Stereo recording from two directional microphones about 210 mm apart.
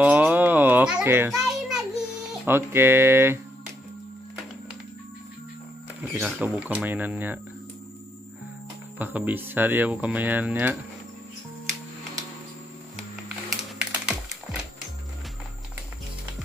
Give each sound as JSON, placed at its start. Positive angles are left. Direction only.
{"t": 0.0, "sound": "a sound", "side_deg": -5}
{"t": 6.1, "sound": "speech", "side_deg": -5}
{"t": 8.9, "sound": "speech", "side_deg": -10}